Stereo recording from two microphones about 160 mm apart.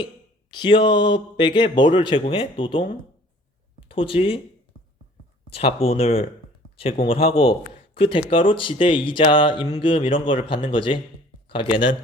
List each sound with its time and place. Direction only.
0.5 s speech: 30° left (ahead or behind)
5.5 s speech: 35° left (ahead or behind)